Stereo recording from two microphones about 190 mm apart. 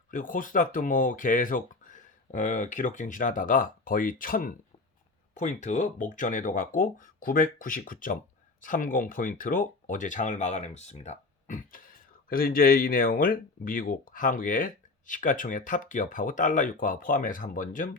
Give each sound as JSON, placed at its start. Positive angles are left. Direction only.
{"t": 0.1, "sound": "speech", "side_deg": 45}